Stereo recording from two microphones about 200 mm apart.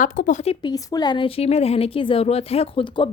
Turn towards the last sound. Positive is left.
turn(degrees=25)  # may be behind; listen again after turning